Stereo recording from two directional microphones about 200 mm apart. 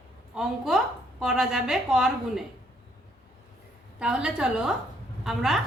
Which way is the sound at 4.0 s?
5° right (ahead or behind).